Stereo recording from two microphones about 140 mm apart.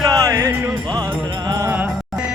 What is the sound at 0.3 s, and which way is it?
Music, 25° right (ahead or behind).